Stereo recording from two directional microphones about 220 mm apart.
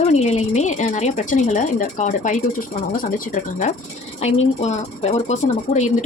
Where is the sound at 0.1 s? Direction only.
30° left (ahead or behind).